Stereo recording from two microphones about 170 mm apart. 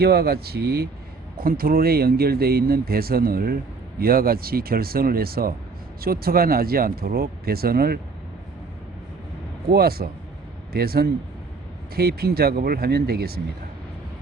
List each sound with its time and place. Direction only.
0.0 s speech: 70° right (ahead or behind)
1.4 s speech: 60° right (ahead or behind)
9.7 s speech: 65° right (ahead or behind)